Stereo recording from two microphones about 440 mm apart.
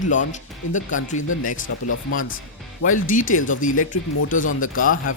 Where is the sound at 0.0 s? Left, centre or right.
Centre.